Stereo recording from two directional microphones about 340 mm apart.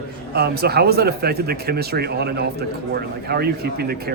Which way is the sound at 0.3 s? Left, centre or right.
Right.